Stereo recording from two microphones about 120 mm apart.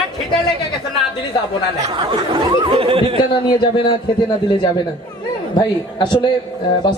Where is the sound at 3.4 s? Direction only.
40° left (ahead or behind).